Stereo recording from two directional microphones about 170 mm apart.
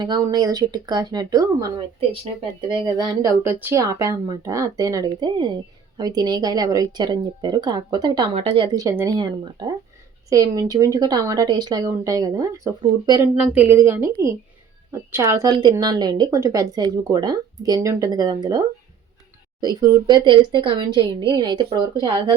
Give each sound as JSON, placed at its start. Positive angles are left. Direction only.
{"t": 0.0, "sound": "speech", "side_deg": -25}
{"t": 2.8, "sound": "speech", "side_deg": -25}
{"t": 13.3, "sound": "a woman's voice", "side_deg": -5}
{"t": 19.6, "sound": "speech", "side_deg": -20}